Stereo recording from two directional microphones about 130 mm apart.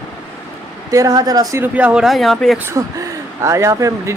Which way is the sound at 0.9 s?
25° right (ahead or behind).